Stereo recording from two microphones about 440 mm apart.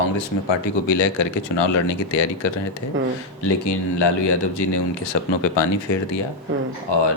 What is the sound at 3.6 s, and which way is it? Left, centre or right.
Speech, left.